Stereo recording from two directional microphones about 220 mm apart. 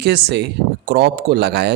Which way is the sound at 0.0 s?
50° right (ahead or behind).